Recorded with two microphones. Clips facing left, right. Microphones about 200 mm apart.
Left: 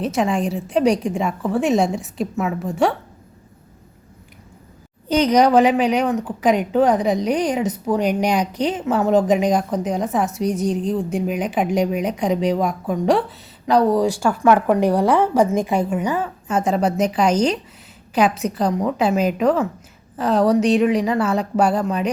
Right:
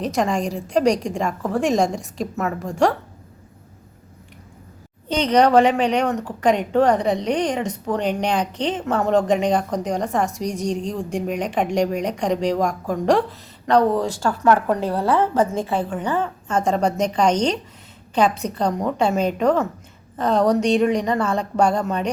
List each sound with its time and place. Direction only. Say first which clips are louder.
0.0 s a woman's voice: left 1 dB; 5° left (ahead or behind)
5.0 s a woman's voice: left 2 dB; 10° left (ahead or behind)